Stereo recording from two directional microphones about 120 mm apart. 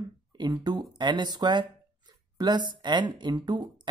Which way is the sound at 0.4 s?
35° right (ahead or behind).